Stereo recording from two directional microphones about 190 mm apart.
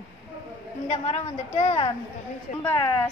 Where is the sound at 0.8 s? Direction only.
35° left (ahead or behind).